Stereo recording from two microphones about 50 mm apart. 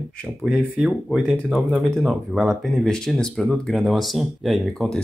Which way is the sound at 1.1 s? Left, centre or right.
Right.